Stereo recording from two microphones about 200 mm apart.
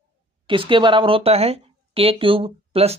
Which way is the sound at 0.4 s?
25° right (ahead or behind).